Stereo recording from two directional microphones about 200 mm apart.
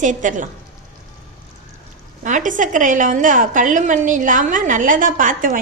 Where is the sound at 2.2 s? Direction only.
40° right (ahead or behind).